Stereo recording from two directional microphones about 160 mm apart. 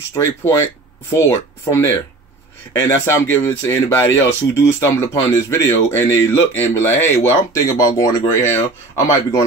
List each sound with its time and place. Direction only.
0.1 s speech: 15° left (ahead or behind)